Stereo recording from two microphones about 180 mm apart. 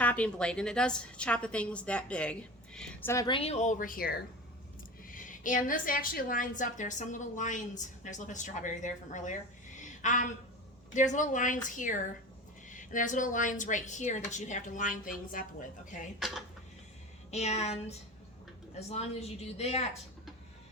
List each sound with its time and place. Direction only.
0.0 s a woman's voice: 10° left (ahead or behind)
3.2 s speech: 30° left (ahead or behind); by 15.4 s 50° left (ahead or behind)
17.3 s a woman's voice: 35° left (ahead or behind)